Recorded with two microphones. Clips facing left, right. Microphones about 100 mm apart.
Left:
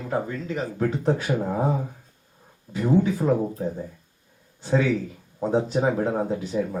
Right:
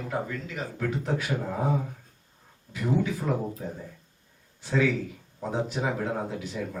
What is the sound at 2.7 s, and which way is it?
Speech, 35° left (ahead or behind).